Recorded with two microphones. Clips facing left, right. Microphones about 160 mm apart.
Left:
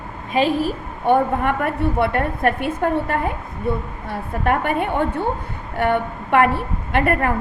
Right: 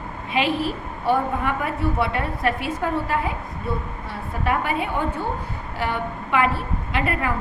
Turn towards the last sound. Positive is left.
turn(degrees=55)  # may be behind; listen again after turning